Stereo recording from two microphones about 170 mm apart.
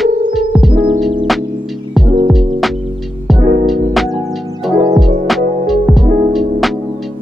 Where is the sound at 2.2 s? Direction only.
Centre (ahead or behind).